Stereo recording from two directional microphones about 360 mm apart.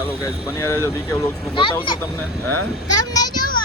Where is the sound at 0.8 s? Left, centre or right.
Centre.